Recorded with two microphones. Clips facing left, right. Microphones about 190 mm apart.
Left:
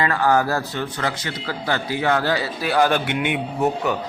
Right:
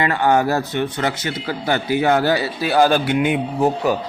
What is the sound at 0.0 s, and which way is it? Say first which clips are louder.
Speech: right 2 dB; 25° right (ahead or behind).